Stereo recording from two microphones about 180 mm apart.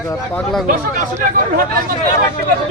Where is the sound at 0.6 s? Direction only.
45° right (ahead or behind).